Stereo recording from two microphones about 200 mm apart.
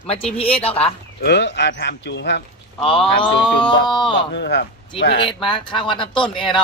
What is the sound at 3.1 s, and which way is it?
Speech, 25° left (ahead or behind).